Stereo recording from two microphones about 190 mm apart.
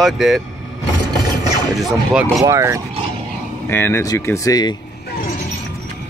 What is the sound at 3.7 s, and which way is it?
Speech, 10° left (ahead or behind).